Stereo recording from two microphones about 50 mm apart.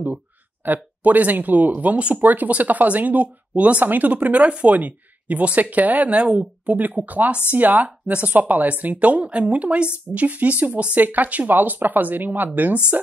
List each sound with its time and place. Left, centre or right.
0.6 s speech: right